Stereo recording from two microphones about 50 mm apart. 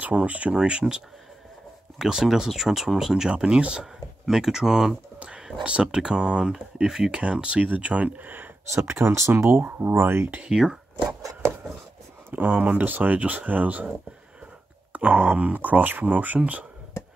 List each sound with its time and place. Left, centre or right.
0.1 s speech: right; by 3.3 s centre
3.3 s speech: centre
3.8 s speech: centre
5.2 s speech: right
7.6 s speech: right
8.7 s speech: right
9.3 s speech: right
10.3 s speech: centre
12.3 s speech: right
14.9 s speech: right